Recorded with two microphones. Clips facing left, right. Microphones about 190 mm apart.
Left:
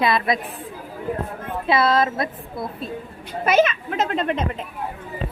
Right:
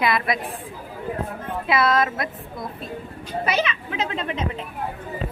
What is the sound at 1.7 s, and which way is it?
Speech, 30° left (ahead or behind).